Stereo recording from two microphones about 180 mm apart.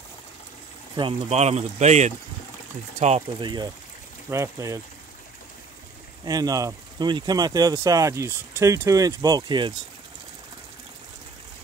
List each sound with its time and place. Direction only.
0.9 s speech: 30° right (ahead or behind)
6.2 s speech: 20° right (ahead or behind)